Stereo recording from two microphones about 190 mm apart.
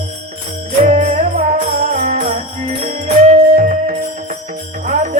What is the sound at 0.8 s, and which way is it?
Music, 40° right (ahead or behind).